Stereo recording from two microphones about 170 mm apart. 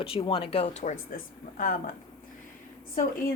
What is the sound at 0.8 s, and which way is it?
Speech, 50° left (ahead or behind).